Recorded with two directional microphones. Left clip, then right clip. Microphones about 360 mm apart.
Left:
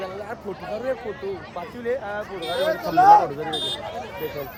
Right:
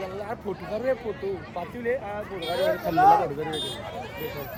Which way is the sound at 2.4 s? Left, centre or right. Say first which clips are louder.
Left 1 dB; left.